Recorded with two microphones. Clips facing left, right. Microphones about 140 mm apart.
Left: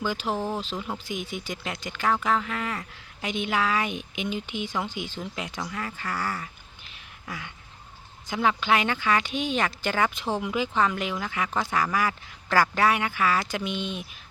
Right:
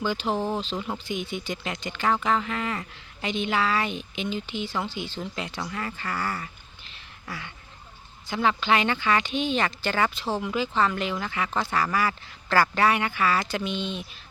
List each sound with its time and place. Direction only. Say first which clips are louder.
0.0 s speech: right 2 dB; 10° left (ahead or behind)
8.4 s speech: even; 10° left (ahead or behind)